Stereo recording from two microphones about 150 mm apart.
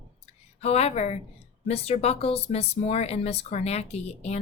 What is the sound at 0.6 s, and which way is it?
Speech, 45° left (ahead or behind).